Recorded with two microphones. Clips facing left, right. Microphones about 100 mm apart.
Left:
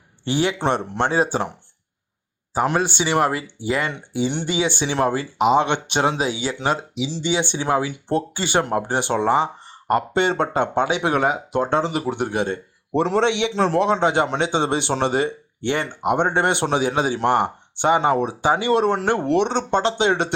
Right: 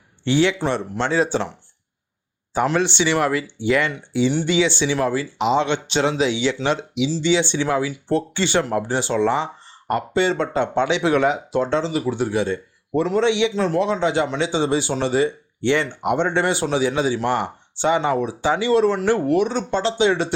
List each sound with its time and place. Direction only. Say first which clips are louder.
0.3 s speech: right 2 dB; 45° left (ahead or behind)
2.7 s speech: even; 45° left (ahead or behind)
7.9 s speech: right 1 dB; 20° left (ahead or behind)
8.4 s speech: right 1 dB; 45° left (ahead or behind)
13.0 s a man's voice: right 1 dB; 65° left (ahead or behind)